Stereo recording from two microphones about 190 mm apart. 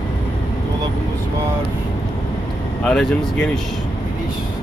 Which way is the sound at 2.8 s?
5° left (ahead or behind).